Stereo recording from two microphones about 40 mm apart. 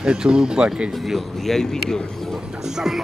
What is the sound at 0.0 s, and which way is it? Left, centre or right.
Speech, right.